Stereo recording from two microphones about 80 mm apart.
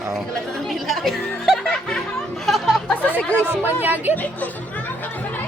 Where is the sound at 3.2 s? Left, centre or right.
Centre.